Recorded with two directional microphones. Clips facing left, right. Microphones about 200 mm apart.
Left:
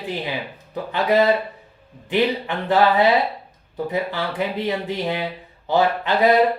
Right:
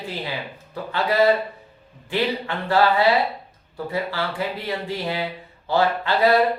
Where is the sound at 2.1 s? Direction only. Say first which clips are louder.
Left 3 dB; 20° left (ahead or behind).